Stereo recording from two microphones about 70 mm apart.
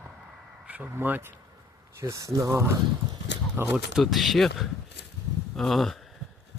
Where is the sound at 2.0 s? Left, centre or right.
Right.